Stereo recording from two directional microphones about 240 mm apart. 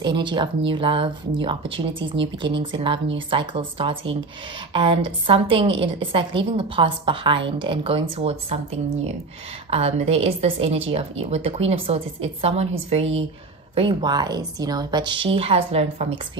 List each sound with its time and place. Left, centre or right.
0.0 s a woman's voice: centre
9.7 s a woman's voice: right